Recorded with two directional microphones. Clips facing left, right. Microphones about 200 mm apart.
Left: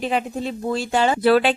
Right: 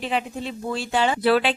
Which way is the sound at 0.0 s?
45° left (ahead or behind).